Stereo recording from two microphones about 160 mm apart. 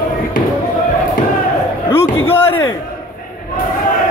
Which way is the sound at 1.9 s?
15° left (ahead or behind).